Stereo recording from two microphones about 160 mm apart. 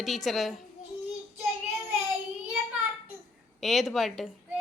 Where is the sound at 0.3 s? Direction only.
Centre (ahead or behind).